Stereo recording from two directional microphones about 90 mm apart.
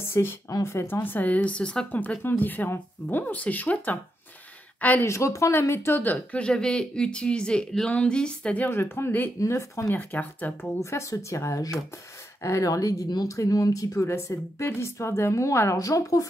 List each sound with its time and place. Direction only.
0.0 s speech: 25° left (ahead or behind)
5.0 s speech: 35° left (ahead or behind); by 8.6 s 10° left (ahead or behind)
8.6 s speech: 25° left (ahead or behind)
9.9 s speech: 20° left (ahead or behind)
10.8 s speech: 30° left (ahead or behind)